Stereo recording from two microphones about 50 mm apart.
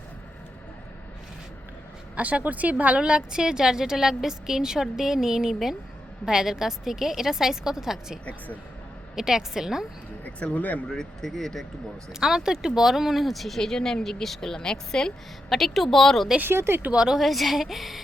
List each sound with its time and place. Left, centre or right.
2.1 s speech: right
3.0 s a woman's voice: centre
8.2 s speech: left
9.1 s a woman's voice: centre
10.6 s speech: left
10.8 s a woman's voice: centre
12.2 s a woman's voice: centre
15.4 s speech: centre
16.6 s speech: right
16.9 s a woman's voice: centre
17.2 s speech: centre